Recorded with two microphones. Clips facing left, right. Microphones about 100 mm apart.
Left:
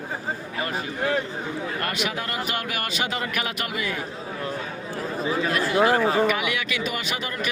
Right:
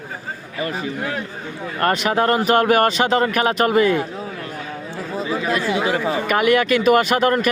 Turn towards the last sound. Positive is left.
turn(degrees=-55)  # may be behind; listen again after turning